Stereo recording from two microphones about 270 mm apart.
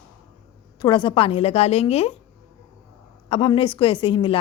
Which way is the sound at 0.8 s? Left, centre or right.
Centre.